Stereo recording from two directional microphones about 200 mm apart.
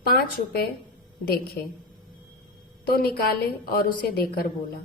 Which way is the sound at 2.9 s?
50° left (ahead or behind).